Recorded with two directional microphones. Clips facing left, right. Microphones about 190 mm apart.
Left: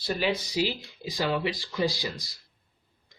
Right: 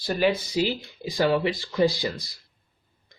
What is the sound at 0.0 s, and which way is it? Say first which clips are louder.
Speech: right 5 dB; 50° right (ahead or behind).